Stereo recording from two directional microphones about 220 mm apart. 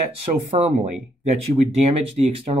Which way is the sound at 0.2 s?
30° right (ahead or behind).